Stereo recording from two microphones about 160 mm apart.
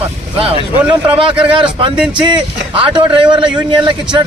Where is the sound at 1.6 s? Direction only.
30° right (ahead or behind).